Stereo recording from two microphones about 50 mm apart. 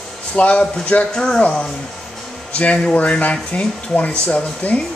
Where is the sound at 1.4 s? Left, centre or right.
Left.